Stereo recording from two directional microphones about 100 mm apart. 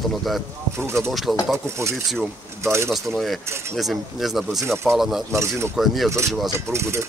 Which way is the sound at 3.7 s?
Centre (ahead or behind).